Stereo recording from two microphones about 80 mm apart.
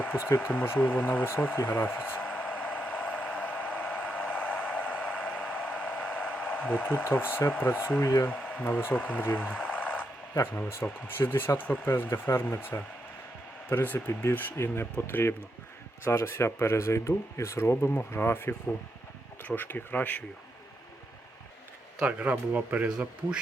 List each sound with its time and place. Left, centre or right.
0.8 s speech: left
2.2 s vehicle: centre
4.0 s a sound: centre
7.0 s speech: left
8.3 s speech: centre
9.6 s radio: centre
10.4 s speech: left
17.7 s speech: left
22.0 s speech: centre